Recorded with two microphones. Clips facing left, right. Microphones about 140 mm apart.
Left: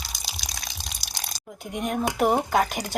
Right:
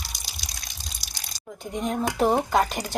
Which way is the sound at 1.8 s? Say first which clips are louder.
Even; 5° left (ahead or behind).